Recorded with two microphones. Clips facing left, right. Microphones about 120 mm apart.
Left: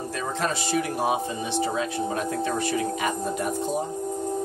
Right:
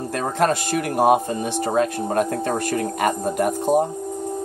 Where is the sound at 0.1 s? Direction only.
55° right (ahead or behind).